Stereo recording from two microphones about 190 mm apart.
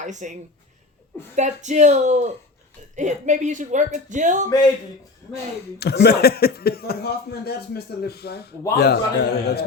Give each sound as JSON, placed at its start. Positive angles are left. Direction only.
{"t": 0.0, "sound": "speech", "side_deg": -40}
{"t": 1.4, "sound": "speech", "side_deg": -40}
{"t": 5.8, "sound": "speech", "side_deg": 60}